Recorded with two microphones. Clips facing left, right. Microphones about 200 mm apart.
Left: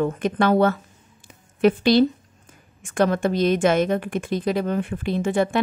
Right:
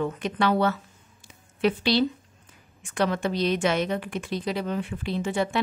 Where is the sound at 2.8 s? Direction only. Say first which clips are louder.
Left 5 dB; 50° left (ahead or behind).